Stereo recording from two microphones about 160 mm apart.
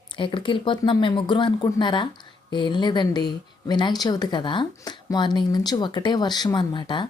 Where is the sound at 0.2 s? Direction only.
30° left (ahead or behind).